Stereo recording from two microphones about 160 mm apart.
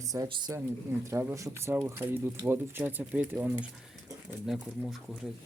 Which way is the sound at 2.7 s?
10° right (ahead or behind).